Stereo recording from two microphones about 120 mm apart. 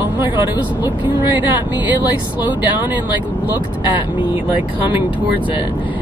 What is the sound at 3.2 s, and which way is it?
Speech, 15° right (ahead or behind).